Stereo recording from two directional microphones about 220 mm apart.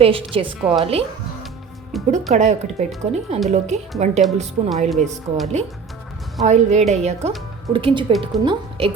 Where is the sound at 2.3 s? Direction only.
30° right (ahead or behind).